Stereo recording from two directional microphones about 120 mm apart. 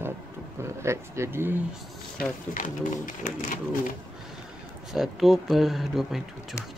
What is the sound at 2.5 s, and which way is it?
Speech, 90° left.